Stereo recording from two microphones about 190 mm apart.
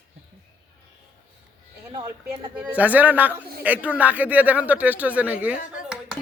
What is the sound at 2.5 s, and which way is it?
Speech, 5° right (ahead or behind).